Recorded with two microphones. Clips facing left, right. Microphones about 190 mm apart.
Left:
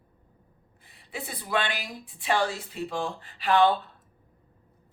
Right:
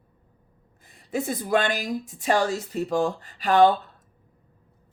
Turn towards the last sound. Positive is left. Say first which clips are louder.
# right 4 dB
turn(degrees=-45)  # may be behind; listen again after turning